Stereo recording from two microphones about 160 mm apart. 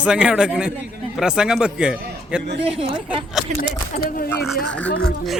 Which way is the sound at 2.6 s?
35° right (ahead or behind).